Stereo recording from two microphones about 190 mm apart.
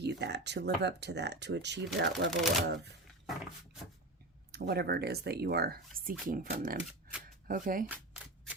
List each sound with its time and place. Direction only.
0.0 s speech: 60° right (ahead or behind)
2.3 s speech: centre (ahead or behind)
4.5 s speech: 60° right (ahead or behind)
7.9 s camera: 5° right (ahead or behind)